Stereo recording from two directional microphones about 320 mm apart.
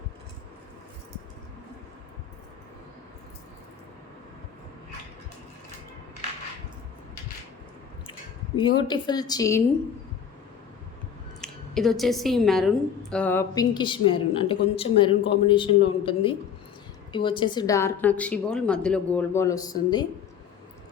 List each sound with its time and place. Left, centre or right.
8.5 s a woman's voice: centre
11.3 s a woman's voice: centre